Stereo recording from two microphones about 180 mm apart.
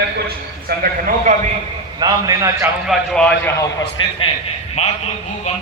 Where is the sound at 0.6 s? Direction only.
50° right (ahead or behind).